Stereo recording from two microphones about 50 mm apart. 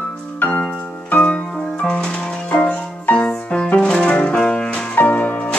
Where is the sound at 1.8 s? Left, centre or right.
Centre.